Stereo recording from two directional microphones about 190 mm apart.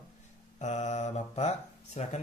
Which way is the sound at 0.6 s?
40° left (ahead or behind).